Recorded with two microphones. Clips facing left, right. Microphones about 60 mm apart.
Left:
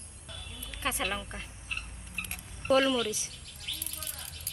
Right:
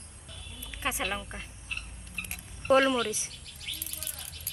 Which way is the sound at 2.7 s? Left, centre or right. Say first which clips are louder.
Right 2 dB; right.